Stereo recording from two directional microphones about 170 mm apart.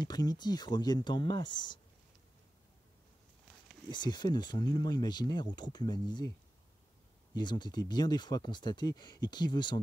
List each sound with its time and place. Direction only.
0.0 s speech: 25° left (ahead or behind)
3.9 s speech: 25° left (ahead or behind)
7.3 s speech: 25° left (ahead or behind)